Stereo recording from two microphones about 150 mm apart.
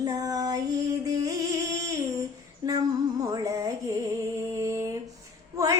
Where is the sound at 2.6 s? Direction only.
25° right (ahead or behind).